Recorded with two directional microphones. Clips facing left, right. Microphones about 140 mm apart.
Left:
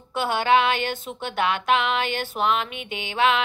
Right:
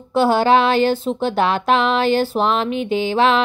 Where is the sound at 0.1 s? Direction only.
35° right (ahead or behind).